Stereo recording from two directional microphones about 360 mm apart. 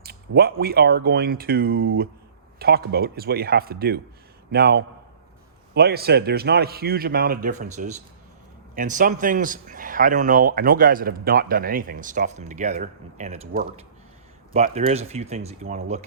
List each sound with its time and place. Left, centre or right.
0.0 s a man's voice: right